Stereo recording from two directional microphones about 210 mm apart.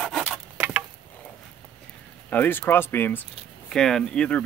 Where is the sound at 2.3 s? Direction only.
10° left (ahead or behind).